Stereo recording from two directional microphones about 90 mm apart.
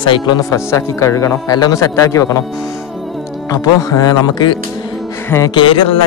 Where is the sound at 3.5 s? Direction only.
40° left (ahead or behind).